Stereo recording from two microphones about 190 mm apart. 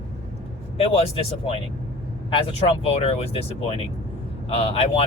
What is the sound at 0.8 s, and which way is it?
Speech, 30° left (ahead or behind).